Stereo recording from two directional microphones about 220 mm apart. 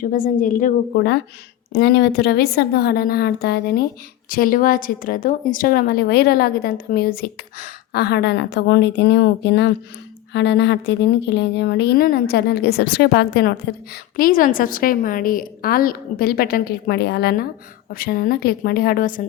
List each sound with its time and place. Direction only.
0.0 s a woman's voice: 40° left (ahead or behind)